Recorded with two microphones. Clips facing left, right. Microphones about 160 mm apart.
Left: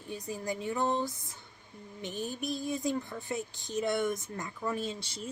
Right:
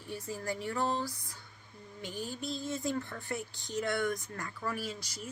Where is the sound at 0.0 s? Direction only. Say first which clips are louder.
Left 1 dB; 20° left (ahead or behind).